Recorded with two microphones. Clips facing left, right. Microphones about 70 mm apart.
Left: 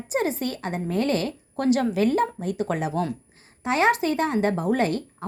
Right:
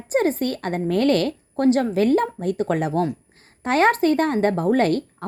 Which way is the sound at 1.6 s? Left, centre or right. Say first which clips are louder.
Right 3 dB; right.